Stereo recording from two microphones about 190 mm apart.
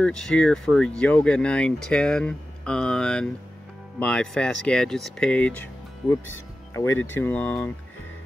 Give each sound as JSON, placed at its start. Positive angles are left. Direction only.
{"t": 0.0, "sound": "speech", "side_deg": 5}